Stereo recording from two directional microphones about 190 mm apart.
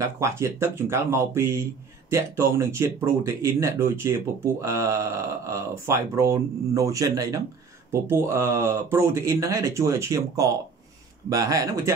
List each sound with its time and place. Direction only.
0.0 s speech: 15° right (ahead or behind)